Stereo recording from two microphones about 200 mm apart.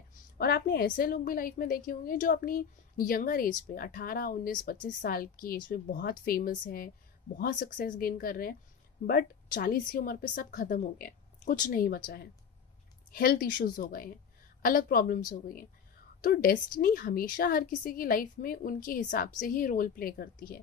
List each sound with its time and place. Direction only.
0.4 s a woman's voice: 50° left (ahead or behind)
13.1 s a woman's voice: 50° left (ahead or behind)